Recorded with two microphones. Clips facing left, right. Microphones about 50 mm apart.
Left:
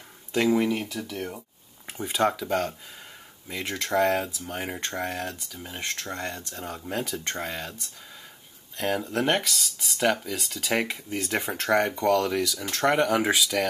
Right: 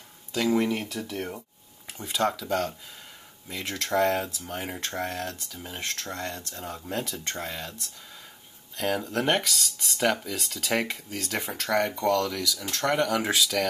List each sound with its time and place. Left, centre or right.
0.5 s speech: centre
2.0 s speech: centre
8.7 s speech: centre
11.1 s speech: left